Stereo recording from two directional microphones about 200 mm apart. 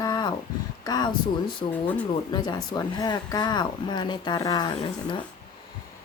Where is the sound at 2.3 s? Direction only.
20° left (ahead or behind).